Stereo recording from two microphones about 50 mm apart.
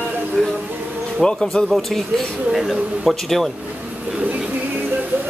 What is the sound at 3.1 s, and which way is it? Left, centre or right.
Speech, centre.